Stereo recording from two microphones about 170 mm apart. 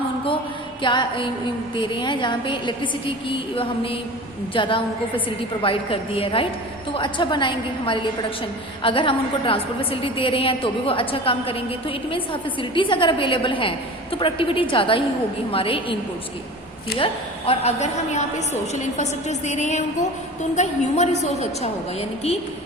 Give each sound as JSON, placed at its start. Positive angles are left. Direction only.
{"t": 0.8, "sound": "a woman's voice", "side_deg": 30}
{"t": 17.0, "sound": "a woman's voice", "side_deg": 35}